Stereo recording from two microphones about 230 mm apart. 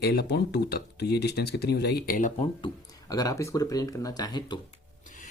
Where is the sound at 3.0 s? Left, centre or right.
Centre.